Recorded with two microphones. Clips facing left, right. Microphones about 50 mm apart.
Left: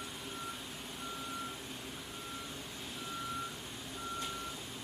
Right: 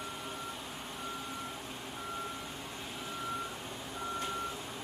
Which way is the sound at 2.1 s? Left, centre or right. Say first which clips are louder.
Right 6 dB; right.